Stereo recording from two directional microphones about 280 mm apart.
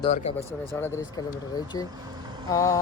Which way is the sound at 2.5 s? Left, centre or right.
Centre.